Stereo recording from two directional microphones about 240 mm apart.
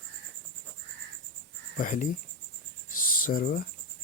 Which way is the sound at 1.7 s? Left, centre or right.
Left.